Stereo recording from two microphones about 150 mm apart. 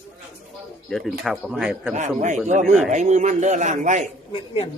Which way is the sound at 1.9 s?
55° right (ahead or behind).